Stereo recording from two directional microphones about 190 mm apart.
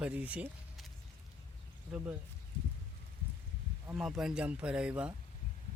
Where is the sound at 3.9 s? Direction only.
Centre (ahead or behind).